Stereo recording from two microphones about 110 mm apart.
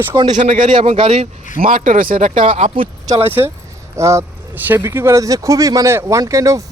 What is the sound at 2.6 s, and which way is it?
Speech, 75° right (ahead or behind).